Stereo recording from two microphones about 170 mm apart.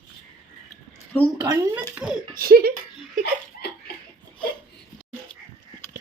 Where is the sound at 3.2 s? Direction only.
75° left (ahead or behind).